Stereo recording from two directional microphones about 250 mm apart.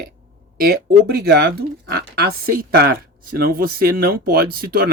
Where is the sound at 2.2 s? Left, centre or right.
Right.